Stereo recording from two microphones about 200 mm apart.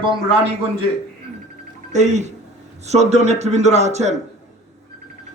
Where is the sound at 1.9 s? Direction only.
35° right (ahead or behind).